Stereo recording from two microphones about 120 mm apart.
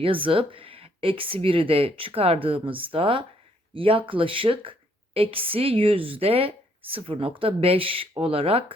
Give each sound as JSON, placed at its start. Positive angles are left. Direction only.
{"t": 0.0, "sound": "a woman's voice", "side_deg": -50}